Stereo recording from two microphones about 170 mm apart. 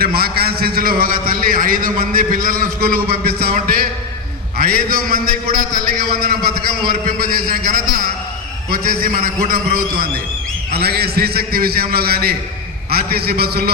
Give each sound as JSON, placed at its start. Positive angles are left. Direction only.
{"t": 0.0, "sound": "a man's voice", "side_deg": -65}